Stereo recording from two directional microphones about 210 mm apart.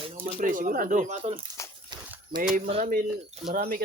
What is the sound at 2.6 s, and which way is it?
Speech, 30° right (ahead or behind).